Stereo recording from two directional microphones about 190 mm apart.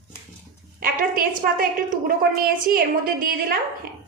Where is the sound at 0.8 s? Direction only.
45° right (ahead or behind).